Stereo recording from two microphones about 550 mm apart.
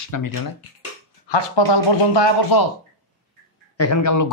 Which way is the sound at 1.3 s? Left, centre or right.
Left.